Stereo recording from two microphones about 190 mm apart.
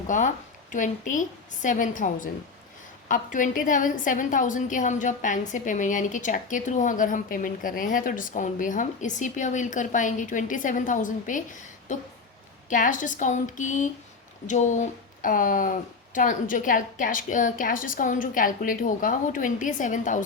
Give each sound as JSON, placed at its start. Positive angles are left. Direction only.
{"t": 0.1, "sound": "a woman's voice", "side_deg": 40}